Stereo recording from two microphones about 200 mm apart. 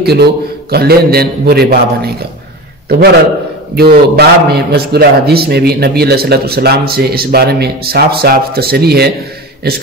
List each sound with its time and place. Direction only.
0.0 s a man's voice: 55° right (ahead or behind)
3.7 s a man's voice: 50° right (ahead or behind)